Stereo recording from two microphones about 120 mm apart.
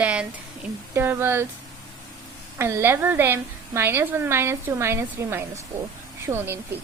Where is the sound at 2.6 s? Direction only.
25° right (ahead or behind).